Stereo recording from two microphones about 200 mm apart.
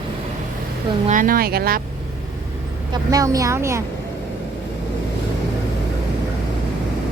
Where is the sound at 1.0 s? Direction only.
40° right (ahead or behind).